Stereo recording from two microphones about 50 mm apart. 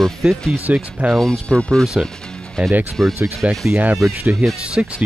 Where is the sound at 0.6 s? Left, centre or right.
Right.